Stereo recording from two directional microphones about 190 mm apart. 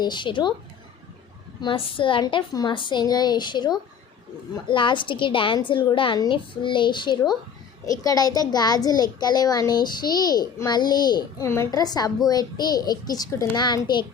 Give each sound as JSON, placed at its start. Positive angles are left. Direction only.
{"t": 0.0, "sound": "a child's voice", "side_deg": 25}
{"t": 1.6, "sound": "a child's voice", "side_deg": 30}